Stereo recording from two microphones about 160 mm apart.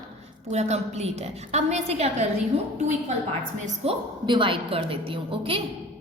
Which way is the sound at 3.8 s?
40° right (ahead or behind).